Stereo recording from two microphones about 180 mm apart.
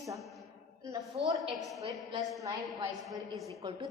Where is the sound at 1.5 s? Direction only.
Centre (ahead or behind).